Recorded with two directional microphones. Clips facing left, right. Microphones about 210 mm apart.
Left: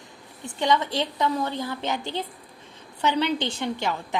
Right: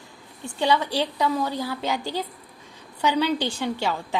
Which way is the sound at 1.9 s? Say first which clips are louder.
Right 2 dB; 25° left (ahead or behind).